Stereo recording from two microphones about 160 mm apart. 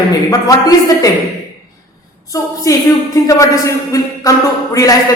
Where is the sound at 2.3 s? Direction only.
20° left (ahead or behind).